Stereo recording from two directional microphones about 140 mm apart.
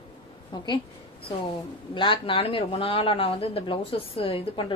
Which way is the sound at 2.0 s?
40° left (ahead or behind).